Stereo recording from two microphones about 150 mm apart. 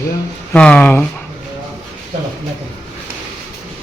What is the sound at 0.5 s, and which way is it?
Speech, 10° left (ahead or behind).